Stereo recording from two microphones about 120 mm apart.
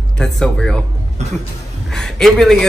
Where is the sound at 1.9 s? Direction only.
5° left (ahead or behind).